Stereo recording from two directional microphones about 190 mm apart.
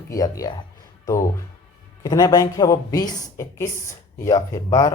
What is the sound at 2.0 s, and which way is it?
A woman's voice, 20° left (ahead or behind).